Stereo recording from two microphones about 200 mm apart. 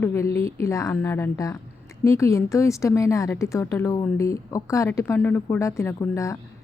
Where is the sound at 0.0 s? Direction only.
15° left (ahead or behind).